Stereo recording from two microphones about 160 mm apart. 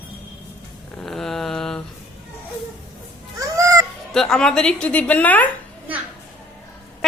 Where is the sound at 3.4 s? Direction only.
20° right (ahead or behind).